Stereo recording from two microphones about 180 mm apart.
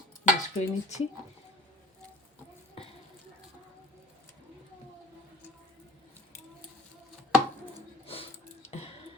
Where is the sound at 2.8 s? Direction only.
30° left (ahead or behind).